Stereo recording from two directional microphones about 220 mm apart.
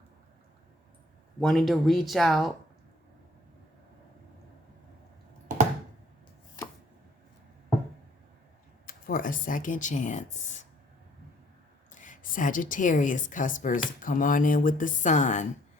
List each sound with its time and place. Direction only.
1.4 s speech: centre (ahead or behind)
8.9 s a woman's voice: 40° left (ahead or behind)
11.9 s a woman's voice: 35° left (ahead or behind)